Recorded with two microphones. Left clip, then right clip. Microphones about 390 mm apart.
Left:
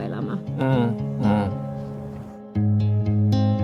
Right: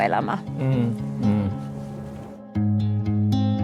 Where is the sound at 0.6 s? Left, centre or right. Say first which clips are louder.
Left 9 dB; left.